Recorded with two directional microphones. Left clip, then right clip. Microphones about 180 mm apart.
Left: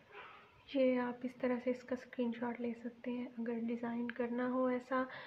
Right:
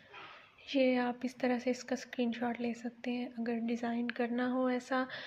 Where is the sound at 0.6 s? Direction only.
20° right (ahead or behind).